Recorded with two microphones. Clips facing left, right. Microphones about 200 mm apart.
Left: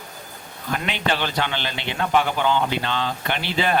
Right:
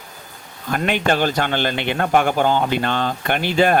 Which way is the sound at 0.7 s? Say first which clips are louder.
Right 5 dB; 50° right (ahead or behind).